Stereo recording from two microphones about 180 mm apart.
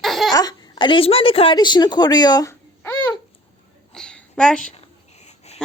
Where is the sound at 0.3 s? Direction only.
25° left (ahead or behind).